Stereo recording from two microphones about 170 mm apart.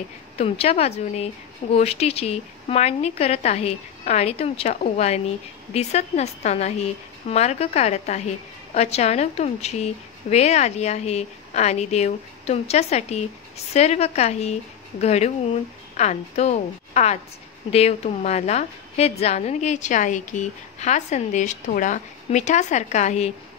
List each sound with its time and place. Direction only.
0.4 s a woman's voice: 35° left (ahead or behind)